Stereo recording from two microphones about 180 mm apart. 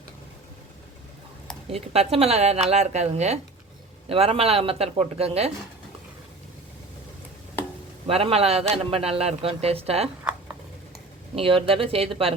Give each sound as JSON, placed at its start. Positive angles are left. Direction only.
{"t": 1.7, "sound": "a man's voice", "side_deg": -35}
{"t": 8.0, "sound": "a man's voice", "side_deg": -35}
{"t": 11.3, "sound": "a man's voice", "side_deg": -30}